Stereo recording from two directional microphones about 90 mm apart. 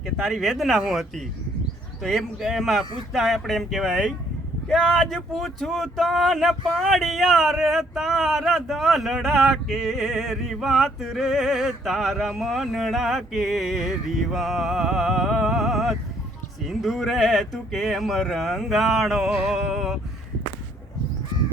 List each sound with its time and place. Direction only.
0.2 s speech: centre (ahead or behind)
2.0 s speech: centre (ahead or behind)